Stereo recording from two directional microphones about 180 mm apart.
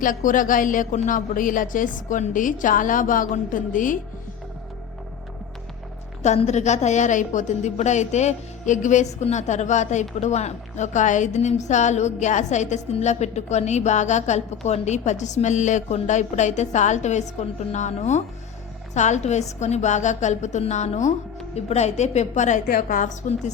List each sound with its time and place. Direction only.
0.0 s a woman's voice: 45° left (ahead or behind)
6.2 s a woman's voice: 40° left (ahead or behind)